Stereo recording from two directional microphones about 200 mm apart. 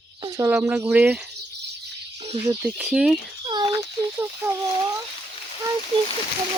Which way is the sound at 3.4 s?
25° right (ahead or behind).